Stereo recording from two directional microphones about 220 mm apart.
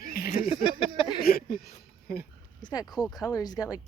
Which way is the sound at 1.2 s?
45° left (ahead or behind).